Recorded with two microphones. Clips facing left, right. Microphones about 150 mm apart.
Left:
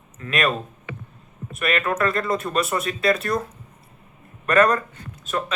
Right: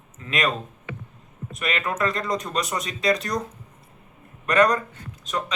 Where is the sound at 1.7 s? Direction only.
20° right (ahead or behind).